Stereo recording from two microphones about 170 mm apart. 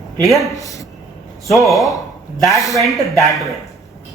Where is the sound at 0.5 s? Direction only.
20° left (ahead or behind).